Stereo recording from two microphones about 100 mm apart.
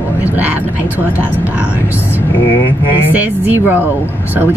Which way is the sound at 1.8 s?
25° left (ahead or behind).